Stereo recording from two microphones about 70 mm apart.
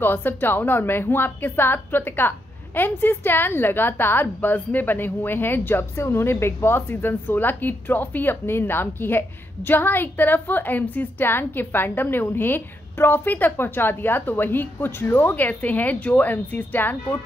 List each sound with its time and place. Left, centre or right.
0.0 s a woman's voice: left